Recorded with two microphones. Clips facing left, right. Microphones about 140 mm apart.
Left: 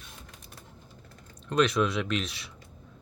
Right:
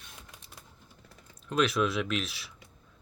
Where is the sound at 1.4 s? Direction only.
5° right (ahead or behind).